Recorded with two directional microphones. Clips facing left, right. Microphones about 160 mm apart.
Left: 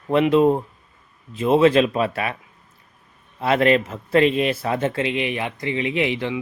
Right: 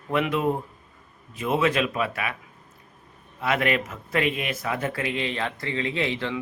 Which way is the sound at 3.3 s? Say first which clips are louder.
Left 7 dB; 30° left (ahead or behind).